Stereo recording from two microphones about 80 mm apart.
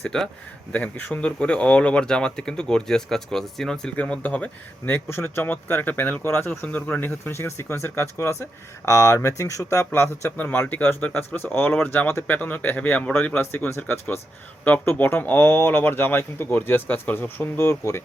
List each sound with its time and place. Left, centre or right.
0.0 s speech: centre
3.9 s speech: centre
4.9 s speech: left